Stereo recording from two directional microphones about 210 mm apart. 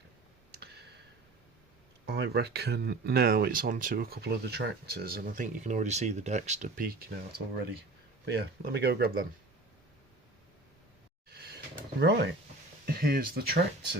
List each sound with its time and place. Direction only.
0.5 s clicking: 50° right (ahead or behind)
2.0 s speech: 50° right (ahead or behind)
8.2 s speech: 50° right (ahead or behind)
11.9 s speech: 50° right (ahead or behind)